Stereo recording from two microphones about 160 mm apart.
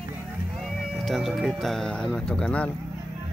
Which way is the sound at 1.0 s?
Centre (ahead or behind).